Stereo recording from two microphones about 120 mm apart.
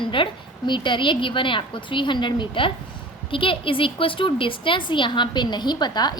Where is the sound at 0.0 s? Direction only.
45° left (ahead or behind).